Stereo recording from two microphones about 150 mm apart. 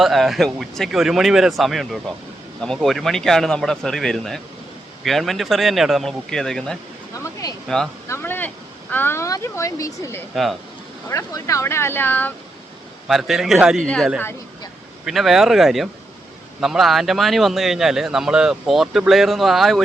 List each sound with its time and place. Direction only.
0.0 s speech: centre (ahead or behind)
7.4 s speech: 25° left (ahead or behind)
10.3 s speech: centre (ahead or behind)
11.1 s speech: 20° left (ahead or behind)
13.1 s speech: centre (ahead or behind)